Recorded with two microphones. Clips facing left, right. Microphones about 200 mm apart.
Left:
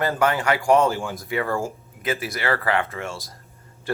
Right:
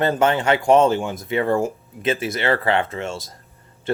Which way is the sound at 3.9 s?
20° right (ahead or behind).